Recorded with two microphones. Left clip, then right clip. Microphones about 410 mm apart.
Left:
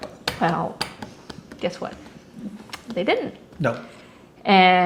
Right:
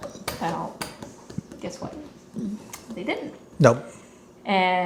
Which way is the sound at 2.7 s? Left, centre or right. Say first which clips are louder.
Left 9 dB; left.